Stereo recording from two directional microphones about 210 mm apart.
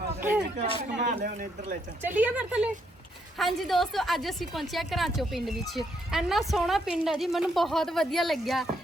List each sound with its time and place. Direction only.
0.2 s speech: 10° right (ahead or behind)
0.9 s speech: 40° right (ahead or behind)
2.0 s a woman's voice: 10° right (ahead or behind)